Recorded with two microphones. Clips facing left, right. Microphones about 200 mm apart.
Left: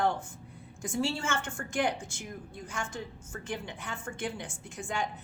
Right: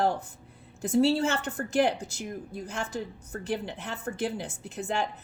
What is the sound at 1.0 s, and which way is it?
A woman's voice, 35° right (ahead or behind).